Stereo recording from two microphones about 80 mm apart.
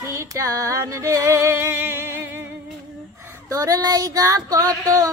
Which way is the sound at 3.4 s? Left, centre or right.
Right.